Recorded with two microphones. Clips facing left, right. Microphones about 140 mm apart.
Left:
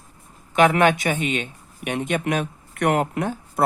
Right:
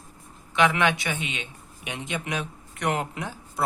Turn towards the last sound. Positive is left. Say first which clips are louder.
# left 7 dB
turn(degrees=55)  # may be behind; listen again after turning